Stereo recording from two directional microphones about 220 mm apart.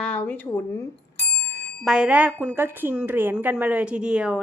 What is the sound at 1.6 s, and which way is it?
A woman's voice, centre (ahead or behind).